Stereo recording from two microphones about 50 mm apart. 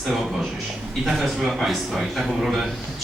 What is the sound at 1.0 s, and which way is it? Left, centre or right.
A man's voice, centre.